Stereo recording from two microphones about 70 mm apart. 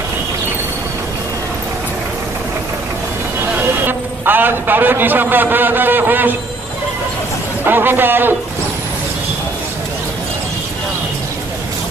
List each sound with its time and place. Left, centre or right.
3.8 s a man's voice: right
7.6 s a man's voice: right